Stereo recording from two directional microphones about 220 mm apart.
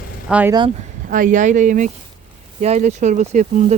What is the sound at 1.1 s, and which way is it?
Speech, 35° right (ahead or behind).